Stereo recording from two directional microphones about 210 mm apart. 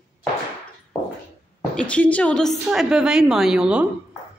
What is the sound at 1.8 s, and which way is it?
A woman's voice, 5° left (ahead or behind).